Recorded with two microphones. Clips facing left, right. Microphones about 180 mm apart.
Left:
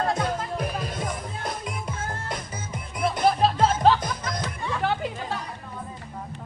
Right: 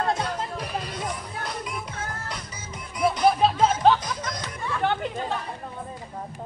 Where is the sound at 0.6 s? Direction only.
50° left (ahead or behind).